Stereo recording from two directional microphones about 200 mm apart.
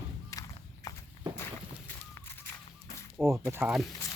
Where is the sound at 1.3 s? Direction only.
10° left (ahead or behind).